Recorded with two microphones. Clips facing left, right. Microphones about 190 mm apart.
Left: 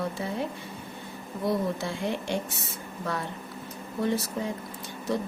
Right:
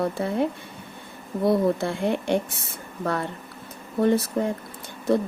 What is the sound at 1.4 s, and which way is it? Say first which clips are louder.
Speech: right 7 dB; 60° right (ahead or behind).